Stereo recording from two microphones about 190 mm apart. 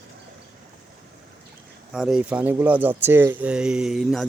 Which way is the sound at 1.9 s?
5° right (ahead or behind).